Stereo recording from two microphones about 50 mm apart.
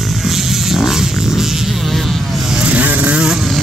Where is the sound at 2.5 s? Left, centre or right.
Right.